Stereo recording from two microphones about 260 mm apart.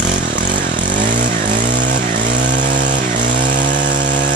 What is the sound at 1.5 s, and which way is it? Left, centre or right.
Vehicle, right.